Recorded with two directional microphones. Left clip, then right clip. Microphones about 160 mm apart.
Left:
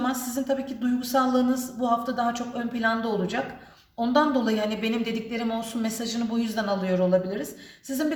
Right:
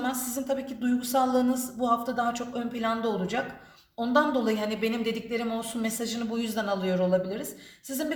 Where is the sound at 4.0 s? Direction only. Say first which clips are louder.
Left 2 dB; 45° right (ahead or behind).